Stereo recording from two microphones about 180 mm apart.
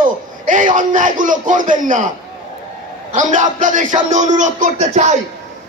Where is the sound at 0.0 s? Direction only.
45° right (ahead or behind).